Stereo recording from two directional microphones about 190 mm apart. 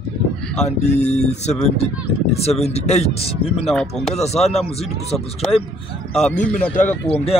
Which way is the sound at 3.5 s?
Centre (ahead or behind).